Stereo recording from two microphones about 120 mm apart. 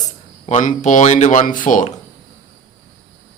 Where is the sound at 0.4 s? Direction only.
75° left (ahead or behind); by 1.9 s 90° left.